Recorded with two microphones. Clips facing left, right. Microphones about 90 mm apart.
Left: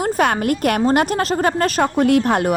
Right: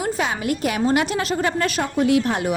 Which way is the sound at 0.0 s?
55° left (ahead or behind).